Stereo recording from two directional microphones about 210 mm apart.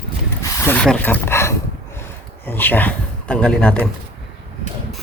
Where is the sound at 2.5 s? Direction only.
10° left (ahead or behind).